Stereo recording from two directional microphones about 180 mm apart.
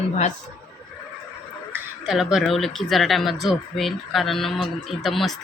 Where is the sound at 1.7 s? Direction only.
5° right (ahead or behind).